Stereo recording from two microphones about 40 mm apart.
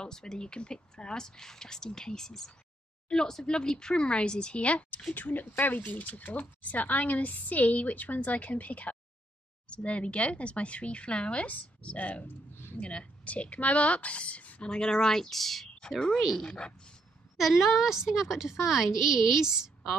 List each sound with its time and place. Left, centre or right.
0.0 s speech: centre
5.1 s a woman's voice: left
9.7 s a woman's voice: left
14.6 s speech: left; by 15.7 s centre
16.4 s speech: left
17.4 s a woman's voice: centre